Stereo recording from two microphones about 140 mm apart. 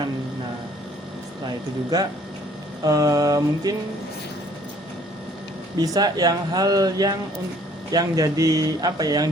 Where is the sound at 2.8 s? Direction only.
25° right (ahead or behind).